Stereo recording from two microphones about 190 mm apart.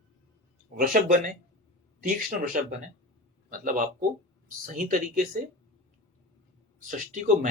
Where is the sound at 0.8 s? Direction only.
45° right (ahead or behind).